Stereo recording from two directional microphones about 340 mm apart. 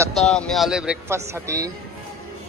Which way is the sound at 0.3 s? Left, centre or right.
Centre.